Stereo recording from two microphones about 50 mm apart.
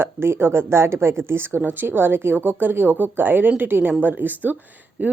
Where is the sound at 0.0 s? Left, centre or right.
Right.